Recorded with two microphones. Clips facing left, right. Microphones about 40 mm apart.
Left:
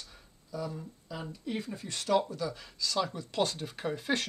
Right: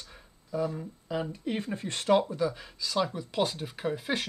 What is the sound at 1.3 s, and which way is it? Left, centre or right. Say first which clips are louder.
Speech: right 4 dB; right.